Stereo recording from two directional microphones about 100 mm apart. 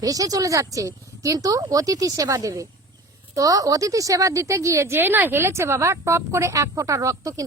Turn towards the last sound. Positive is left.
turn(degrees=-35)  # may be behind; listen again after turning